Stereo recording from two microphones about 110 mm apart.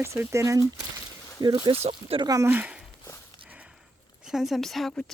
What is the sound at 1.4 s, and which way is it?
Speech, 40° right (ahead or behind).